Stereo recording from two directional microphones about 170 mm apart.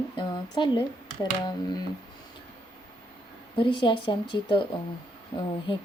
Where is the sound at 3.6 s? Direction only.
30° left (ahead or behind).